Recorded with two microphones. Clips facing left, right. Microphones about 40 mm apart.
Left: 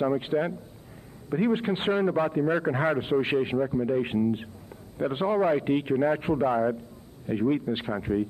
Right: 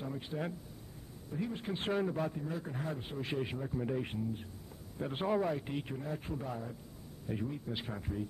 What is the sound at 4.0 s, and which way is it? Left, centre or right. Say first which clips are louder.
Speech: left 13 dB; left.